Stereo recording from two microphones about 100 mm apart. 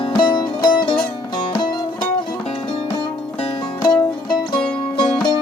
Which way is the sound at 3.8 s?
45° left (ahead or behind).